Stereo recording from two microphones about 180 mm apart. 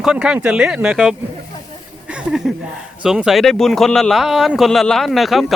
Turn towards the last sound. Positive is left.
turn(degrees=0)  # may be behind; listen again after turning